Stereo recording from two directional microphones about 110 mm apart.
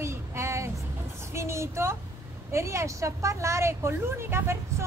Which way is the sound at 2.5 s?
25° right (ahead or behind).